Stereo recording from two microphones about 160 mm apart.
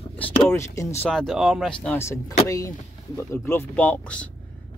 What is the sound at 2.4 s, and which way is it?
Speech, 20° left (ahead or behind).